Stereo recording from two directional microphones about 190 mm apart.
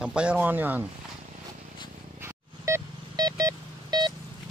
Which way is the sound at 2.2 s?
15° right (ahead or behind).